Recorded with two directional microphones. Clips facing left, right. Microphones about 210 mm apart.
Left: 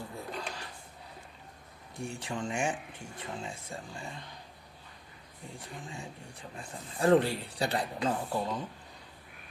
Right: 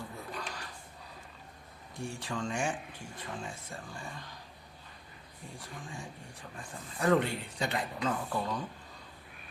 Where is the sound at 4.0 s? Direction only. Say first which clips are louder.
Left 1 dB; 20° left (ahead or behind).